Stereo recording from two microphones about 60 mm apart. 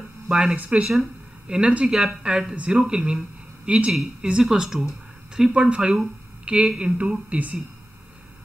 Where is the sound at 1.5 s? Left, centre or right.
Centre.